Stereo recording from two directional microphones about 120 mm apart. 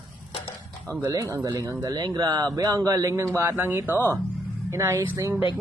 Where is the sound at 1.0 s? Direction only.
30° right (ahead or behind).